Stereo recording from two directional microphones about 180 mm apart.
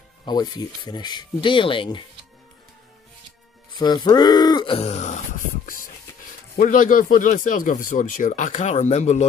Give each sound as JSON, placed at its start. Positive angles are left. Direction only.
{"t": 0.2, "sound": "speech", "side_deg": 25}
{"t": 3.7, "sound": "speech", "side_deg": 25}
{"t": 6.5, "sound": "speech", "side_deg": 50}